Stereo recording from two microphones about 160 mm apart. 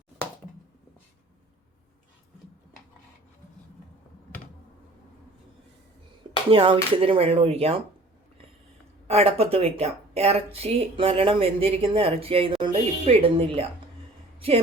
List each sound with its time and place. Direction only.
6.5 s speech: 35° right (ahead or behind)
9.0 s a woman's voice: 40° right (ahead or behind)